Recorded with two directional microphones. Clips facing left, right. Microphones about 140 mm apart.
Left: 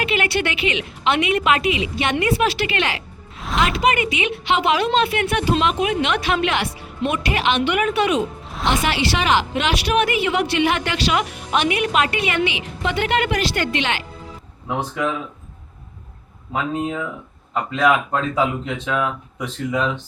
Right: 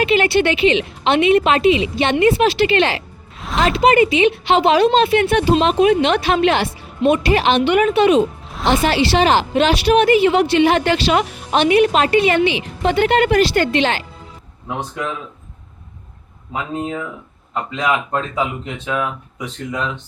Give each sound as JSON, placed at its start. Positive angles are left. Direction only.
{"t": 0.0, "sound": "a woman's voice", "side_deg": -30}
{"t": 3.3, "sound": "music", "side_deg": 0}
{"t": 3.6, "sound": "a woman's voice", "side_deg": -30}
{"t": 8.4, "sound": "music", "side_deg": 0}
{"t": 8.7, "sound": "a woman's voice", "side_deg": -35}
{"t": 14.7, "sound": "speech", "side_deg": 0}
{"t": 16.5, "sound": "speech", "side_deg": 0}